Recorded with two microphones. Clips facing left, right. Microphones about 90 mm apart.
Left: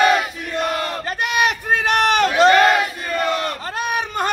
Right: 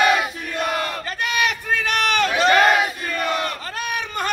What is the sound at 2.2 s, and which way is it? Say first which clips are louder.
Crowd: left 5 dB; 35° left (ahead or behind).